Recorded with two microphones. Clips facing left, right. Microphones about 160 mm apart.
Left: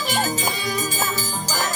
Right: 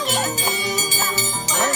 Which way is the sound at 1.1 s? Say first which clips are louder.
Right 2 dB; 70° right (ahead or behind).